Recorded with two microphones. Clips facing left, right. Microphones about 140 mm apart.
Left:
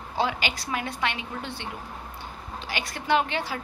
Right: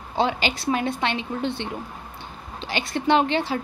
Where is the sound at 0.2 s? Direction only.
30° right (ahead or behind).